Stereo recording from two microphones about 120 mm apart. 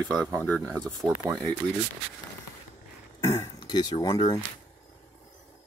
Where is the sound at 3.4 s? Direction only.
35° left (ahead or behind).